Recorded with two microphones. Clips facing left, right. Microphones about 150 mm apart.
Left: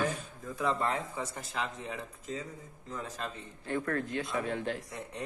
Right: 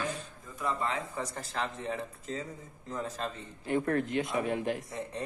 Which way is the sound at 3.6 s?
20° right (ahead or behind).